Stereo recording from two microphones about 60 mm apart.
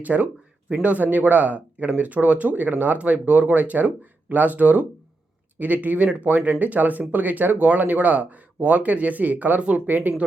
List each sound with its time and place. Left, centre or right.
0.0 s speech: right